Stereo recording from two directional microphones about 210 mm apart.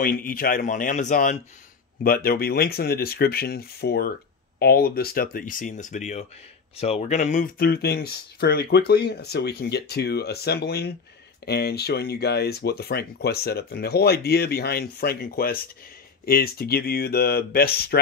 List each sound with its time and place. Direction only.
0.0 s speech: 45° left (ahead or behind)
2.0 s speech: 45° left (ahead or behind)